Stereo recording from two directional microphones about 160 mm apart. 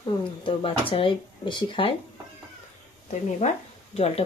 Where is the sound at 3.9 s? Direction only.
40° left (ahead or behind).